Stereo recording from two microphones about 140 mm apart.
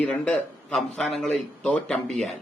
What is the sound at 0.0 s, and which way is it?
A man's voice, 10° left (ahead or behind).